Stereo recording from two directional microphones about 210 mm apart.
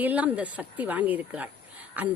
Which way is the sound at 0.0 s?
10° right (ahead or behind).